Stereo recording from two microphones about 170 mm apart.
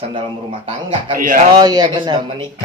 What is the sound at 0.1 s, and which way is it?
A man's voice, 35° right (ahead or behind).